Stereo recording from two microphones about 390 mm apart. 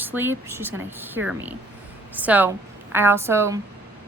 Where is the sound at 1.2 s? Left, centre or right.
Right.